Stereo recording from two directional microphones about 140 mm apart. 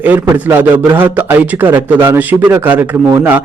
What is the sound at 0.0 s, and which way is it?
A man's voice, 15° right (ahead or behind).